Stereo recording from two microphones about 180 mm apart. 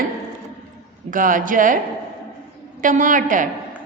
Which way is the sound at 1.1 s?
50° right (ahead or behind).